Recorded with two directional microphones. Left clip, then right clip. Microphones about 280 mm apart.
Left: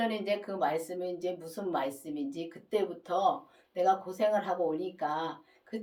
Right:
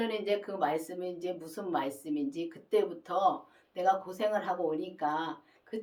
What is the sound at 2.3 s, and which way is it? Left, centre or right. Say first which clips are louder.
Speech: right 3 dB; centre.